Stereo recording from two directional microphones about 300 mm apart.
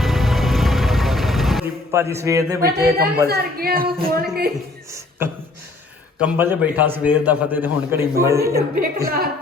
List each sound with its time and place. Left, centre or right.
0.0 s music: centre
3.2 s a woman's voice: right
4.9 s a sound: centre
6.1 s a man's voice: centre
8.8 s a woman's voice: right